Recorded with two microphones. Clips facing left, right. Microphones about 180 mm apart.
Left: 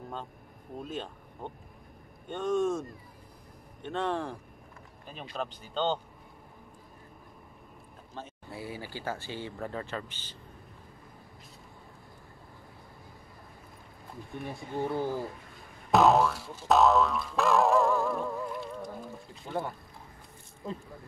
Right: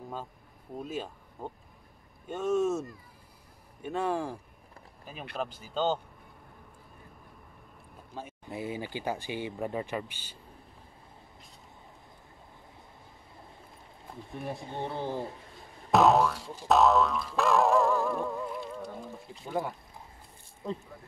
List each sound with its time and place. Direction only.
0.8 s speech: 5° right (ahead or behind)
8.1 s speech: 15° right (ahead or behind)
14.7 s speech: 25° right (ahead or behind)
15.9 s music: centre (ahead or behind)